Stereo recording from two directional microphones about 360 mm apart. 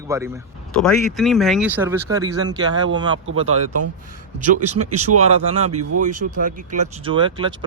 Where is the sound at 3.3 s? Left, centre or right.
Right.